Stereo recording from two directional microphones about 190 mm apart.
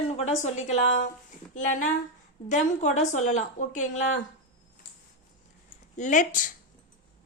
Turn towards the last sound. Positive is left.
turn(degrees=40)  # may be behind; listen again after turning